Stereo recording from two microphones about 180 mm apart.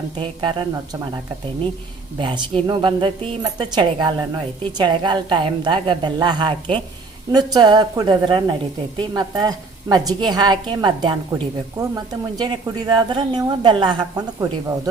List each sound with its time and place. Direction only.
0.2 s a woman's voice: 25° right (ahead or behind)
2.1 s a woman's voice: 25° right (ahead or behind)